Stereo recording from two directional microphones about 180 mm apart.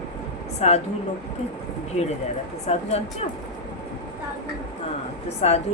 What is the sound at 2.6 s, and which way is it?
Speech, 35° left (ahead or behind).